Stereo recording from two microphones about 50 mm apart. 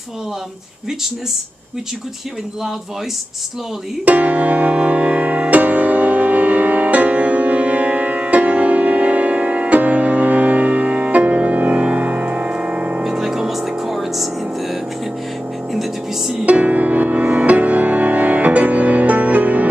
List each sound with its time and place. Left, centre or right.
4.0 s music: right
13.0 s music: centre
15.7 s music: centre
16.4 s music: right